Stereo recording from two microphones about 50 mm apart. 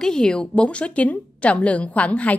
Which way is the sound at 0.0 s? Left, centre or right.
Centre.